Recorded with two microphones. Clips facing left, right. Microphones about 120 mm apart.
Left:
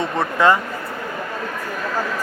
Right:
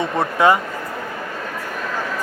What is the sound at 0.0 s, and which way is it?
Speech, 15° right (ahead or behind).